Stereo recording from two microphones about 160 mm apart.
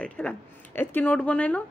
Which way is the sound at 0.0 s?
10° left (ahead or behind).